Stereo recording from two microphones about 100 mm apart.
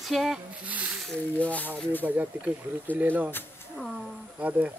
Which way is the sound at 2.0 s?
15° right (ahead or behind).